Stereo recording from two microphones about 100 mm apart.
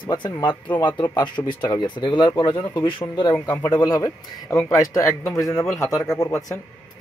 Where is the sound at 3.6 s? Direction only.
40° left (ahead or behind).